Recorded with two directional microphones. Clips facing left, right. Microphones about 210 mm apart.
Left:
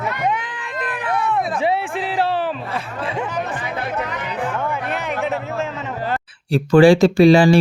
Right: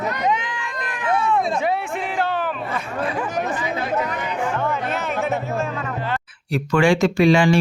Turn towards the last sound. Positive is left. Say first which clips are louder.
# left 4 dB
turn(degrees=35)  # may be behind; listen again after turning